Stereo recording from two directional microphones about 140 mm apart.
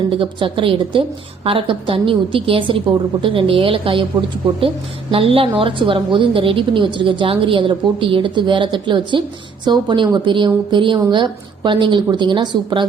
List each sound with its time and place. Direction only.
0.2 s a woman's voice: 40° right (ahead or behind)
5.1 s a woman's voice: 40° right (ahead or behind)